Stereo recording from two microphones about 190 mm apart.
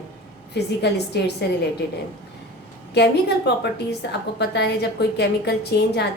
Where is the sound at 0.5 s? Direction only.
60° left (ahead or behind).